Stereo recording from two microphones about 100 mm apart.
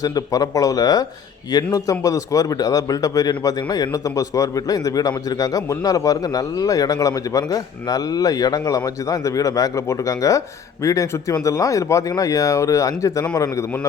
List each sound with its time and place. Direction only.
0.0 s a man's voice: 35° left (ahead or behind)